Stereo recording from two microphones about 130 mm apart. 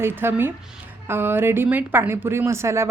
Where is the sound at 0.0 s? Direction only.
15° right (ahead or behind).